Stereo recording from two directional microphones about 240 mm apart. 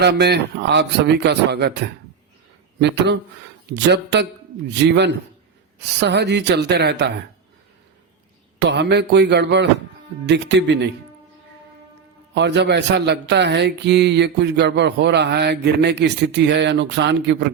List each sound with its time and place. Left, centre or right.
0.0 s speech: right
8.5 s speech: right
12.3 s speech: right